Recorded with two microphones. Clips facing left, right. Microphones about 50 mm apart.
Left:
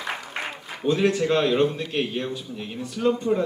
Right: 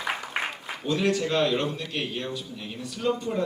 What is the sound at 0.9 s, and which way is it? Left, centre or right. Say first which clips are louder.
Speech: left 4 dB; left.